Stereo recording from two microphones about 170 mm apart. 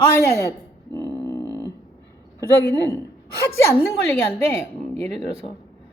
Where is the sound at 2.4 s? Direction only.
15° left (ahead or behind).